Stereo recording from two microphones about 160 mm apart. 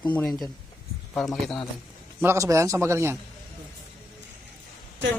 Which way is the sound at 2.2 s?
15° right (ahead or behind).